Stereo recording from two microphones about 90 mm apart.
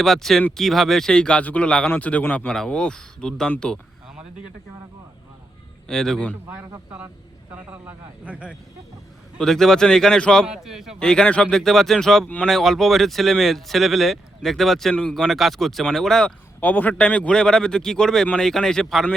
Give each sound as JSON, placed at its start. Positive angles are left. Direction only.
{"t": 0.0, "sound": "a man's voice", "side_deg": 5}
{"t": 5.9, "sound": "speech", "side_deg": 5}
{"t": 7.5, "sound": "speech", "side_deg": -20}
{"t": 9.4, "sound": "a man's voice", "side_deg": 5}
{"t": 10.4, "sound": "speech", "side_deg": -5}
{"t": 11.0, "sound": "a man's voice", "side_deg": 10}
{"t": 16.6, "sound": "a man's voice", "side_deg": 20}